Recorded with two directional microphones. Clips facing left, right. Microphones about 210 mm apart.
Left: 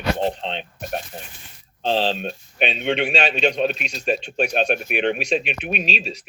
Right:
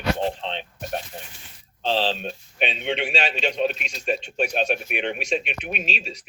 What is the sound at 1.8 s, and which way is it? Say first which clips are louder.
Speech: left 2 dB; 45° left (ahead or behind).